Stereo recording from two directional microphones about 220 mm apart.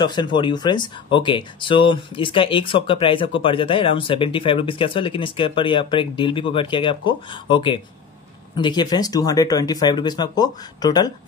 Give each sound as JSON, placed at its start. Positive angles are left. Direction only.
{"t": 0.0, "sound": "speech", "side_deg": 20}